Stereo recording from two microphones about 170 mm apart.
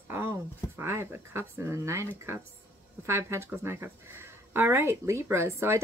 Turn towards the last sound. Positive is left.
turn(degrees=-15)  # may be behind; listen again after turning